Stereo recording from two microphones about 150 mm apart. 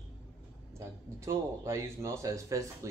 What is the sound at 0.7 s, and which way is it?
Speech, 20° right (ahead or behind).